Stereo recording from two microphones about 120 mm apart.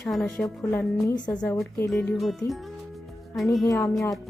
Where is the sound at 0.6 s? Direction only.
20° left (ahead or behind).